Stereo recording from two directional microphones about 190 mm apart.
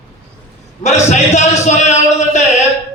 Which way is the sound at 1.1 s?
35° left (ahead or behind).